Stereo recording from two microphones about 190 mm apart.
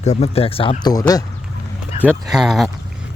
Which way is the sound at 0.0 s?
35° left (ahead or behind).